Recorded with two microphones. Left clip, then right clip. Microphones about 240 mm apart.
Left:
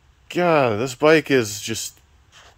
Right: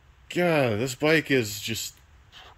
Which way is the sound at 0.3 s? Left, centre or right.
Centre.